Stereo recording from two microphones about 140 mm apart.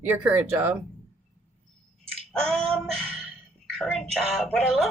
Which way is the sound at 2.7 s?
5° left (ahead or behind).